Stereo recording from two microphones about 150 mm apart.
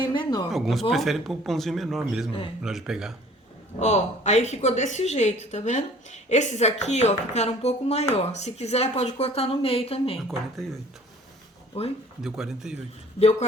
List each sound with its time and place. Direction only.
0.0 s a sound: 30° left (ahead or behind)
0.5 s speech: centre (ahead or behind)
3.8 s a woman's voice: 50° left (ahead or behind)
10.2 s speech: centre (ahead or behind)
11.7 s speech: 40° left (ahead or behind)
12.2 s speech: centre (ahead or behind)
13.2 s a woman's voice: 50° left (ahead or behind)